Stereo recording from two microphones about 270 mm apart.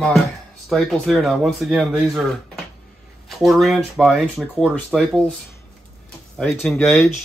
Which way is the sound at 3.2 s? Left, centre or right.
Centre.